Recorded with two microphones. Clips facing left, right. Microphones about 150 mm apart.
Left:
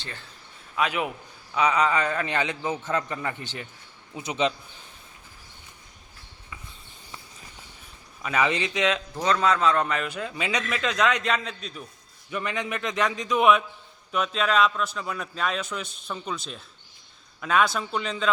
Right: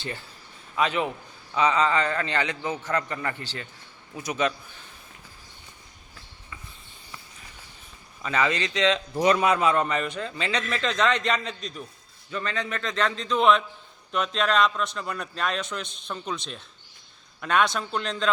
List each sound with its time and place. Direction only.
0.8 s a man's voice: 5° left (ahead or behind)
8.2 s a man's voice: 10° left (ahead or behind)
9.2 s a man's voice: 15° right (ahead or behind); by 11.8 s 5° left (ahead or behind)
12.3 s a man's voice: 15° left (ahead or behind)